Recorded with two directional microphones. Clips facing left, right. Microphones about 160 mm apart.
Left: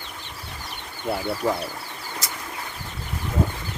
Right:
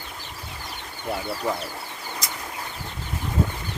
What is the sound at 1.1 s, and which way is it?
Speech, 10° left (ahead or behind).